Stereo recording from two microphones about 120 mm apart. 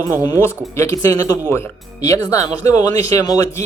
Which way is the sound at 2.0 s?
30° left (ahead or behind).